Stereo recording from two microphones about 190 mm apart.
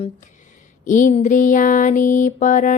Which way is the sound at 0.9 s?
45° left (ahead or behind).